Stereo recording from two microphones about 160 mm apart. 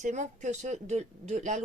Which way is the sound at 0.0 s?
50° right (ahead or behind).